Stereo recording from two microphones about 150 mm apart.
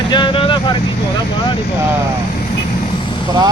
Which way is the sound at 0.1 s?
35° left (ahead or behind).